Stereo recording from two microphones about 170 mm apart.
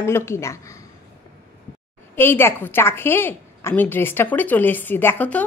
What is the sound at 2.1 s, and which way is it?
A woman's voice, 15° left (ahead or behind).